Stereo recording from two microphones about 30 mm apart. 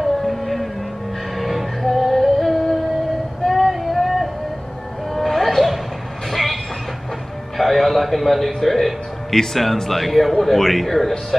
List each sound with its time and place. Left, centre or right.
0.0 s music: centre
3.4 s a sound: centre
6.3 s train: centre
7.5 s a man's voice: centre
9.3 s speech: centre
9.8 s a man's voice: centre